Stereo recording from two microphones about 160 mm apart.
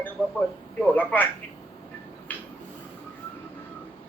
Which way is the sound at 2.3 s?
10° left (ahead or behind).